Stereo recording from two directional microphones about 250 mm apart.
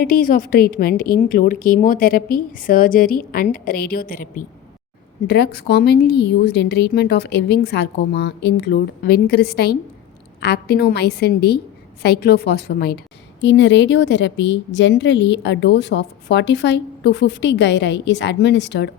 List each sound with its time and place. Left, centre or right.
0.0 s speech: left
5.3 s a woman's voice: left